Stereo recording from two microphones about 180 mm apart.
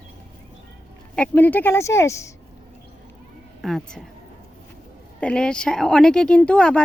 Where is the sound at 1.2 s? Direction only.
10° left (ahead or behind).